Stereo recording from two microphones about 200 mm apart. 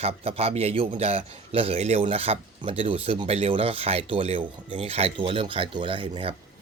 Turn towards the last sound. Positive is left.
turn(degrees=-25)  # may be behind; listen again after turning